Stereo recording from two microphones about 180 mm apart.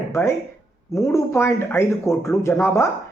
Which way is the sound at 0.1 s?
15° left (ahead or behind).